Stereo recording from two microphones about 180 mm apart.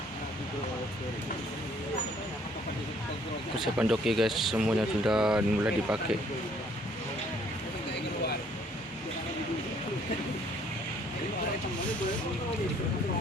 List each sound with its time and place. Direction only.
3.6 s speech: centre (ahead or behind)